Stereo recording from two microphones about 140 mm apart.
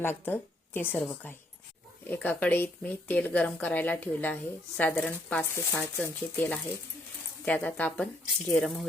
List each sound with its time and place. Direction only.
0.0 s speech: 15° left (ahead or behind)